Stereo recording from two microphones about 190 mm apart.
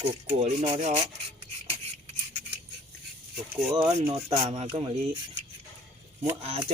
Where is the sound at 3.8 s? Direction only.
30° right (ahead or behind).